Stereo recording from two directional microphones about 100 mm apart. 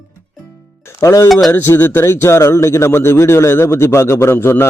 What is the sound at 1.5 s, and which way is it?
Speech, 20° left (ahead or behind).